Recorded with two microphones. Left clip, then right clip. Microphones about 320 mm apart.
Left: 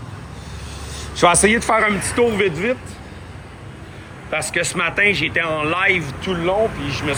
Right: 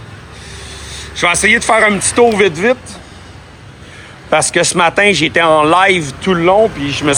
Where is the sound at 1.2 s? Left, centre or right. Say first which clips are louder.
Right 3 dB; centre.